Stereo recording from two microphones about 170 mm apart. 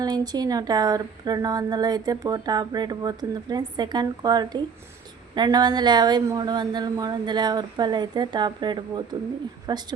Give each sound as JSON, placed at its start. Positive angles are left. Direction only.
{"t": 0.0, "sound": "speech", "side_deg": -25}